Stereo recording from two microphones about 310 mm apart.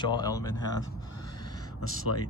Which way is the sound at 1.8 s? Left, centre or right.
Left.